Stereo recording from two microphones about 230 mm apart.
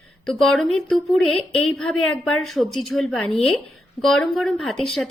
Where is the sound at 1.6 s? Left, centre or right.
Left.